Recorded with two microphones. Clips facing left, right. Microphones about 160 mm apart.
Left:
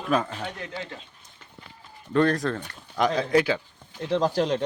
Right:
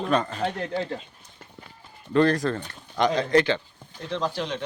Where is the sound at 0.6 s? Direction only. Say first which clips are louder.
Right 7 dB; 40° right (ahead or behind).